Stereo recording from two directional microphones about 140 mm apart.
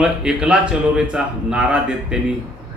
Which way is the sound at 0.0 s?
5° right (ahead or behind).